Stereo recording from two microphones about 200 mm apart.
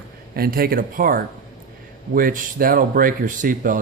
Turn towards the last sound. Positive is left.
turn(degrees=-40)  # may be behind; listen again after turning